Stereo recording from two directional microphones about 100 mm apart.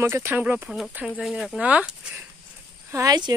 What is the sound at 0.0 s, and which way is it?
Speech, 25° right (ahead or behind).